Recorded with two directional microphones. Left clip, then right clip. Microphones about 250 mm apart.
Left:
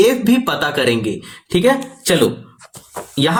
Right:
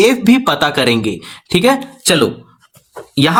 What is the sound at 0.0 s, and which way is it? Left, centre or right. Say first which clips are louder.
Speech: right 2 dB; right.